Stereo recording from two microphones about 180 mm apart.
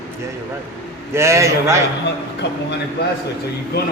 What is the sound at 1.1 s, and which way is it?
Speech, 15° right (ahead or behind).